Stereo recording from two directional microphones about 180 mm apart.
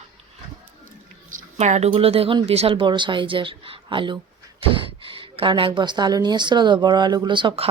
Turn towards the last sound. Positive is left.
turn(degrees=-25)  # may be behind; listen again after turning